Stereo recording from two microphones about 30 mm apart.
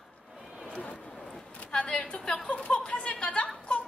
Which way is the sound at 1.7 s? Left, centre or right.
Left.